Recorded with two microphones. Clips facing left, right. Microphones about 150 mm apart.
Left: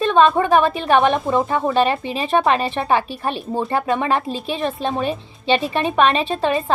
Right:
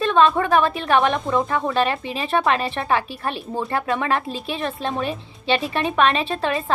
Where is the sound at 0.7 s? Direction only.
Centre (ahead or behind).